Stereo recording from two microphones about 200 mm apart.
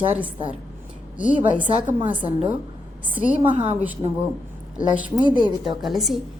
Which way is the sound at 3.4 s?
30° right (ahead or behind).